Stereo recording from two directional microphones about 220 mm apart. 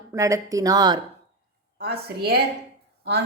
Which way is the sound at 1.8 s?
50° right (ahead or behind).